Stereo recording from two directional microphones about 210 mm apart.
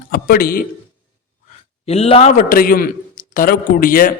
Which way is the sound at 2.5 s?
45° left (ahead or behind).